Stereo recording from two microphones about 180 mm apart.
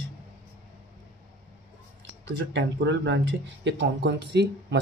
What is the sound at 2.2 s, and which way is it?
Speech, 80° right.